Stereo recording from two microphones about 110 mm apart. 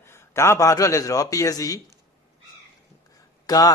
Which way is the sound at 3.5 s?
35° left (ahead or behind).